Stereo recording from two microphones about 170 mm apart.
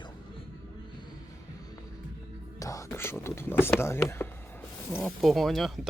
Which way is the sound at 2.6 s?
20° left (ahead or behind).